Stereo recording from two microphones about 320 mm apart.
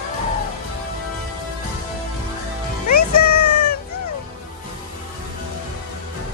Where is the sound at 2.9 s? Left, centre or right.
Left.